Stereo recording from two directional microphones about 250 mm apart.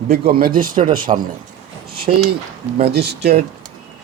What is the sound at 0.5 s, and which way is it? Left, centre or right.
Speech, right.